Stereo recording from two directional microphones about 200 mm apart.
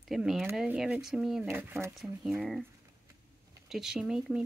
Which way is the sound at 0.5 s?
5° right (ahead or behind).